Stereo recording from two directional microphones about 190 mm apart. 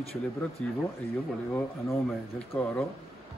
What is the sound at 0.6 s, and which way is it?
Speech, 5° left (ahead or behind).